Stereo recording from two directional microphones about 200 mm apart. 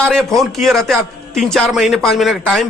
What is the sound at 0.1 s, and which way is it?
A man's voice, centre (ahead or behind).